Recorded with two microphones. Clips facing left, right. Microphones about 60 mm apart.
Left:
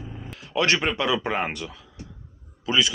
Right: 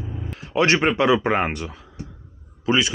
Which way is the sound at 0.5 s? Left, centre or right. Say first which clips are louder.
Right 4 dB; right.